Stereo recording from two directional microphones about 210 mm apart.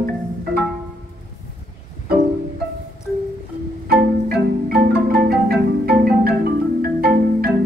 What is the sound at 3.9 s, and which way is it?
Marimba, 45° right (ahead or behind).